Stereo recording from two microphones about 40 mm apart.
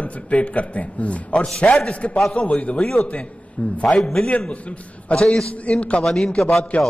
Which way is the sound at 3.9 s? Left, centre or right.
Centre.